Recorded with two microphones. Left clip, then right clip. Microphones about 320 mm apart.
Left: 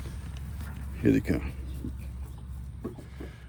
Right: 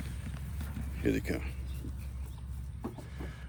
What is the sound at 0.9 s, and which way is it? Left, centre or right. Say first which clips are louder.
Speech: left 7 dB; centre.